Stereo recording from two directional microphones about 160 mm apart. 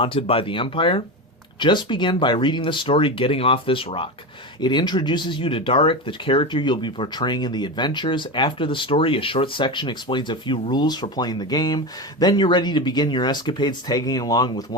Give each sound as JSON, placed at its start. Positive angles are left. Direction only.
{"t": 0.0, "sound": "speech", "side_deg": 35}